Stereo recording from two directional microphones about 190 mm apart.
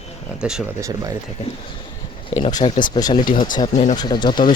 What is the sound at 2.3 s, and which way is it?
Speech, 25° left (ahead or behind).